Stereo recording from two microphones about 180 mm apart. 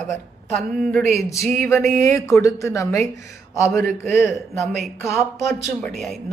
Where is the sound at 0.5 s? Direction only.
5° left (ahead or behind).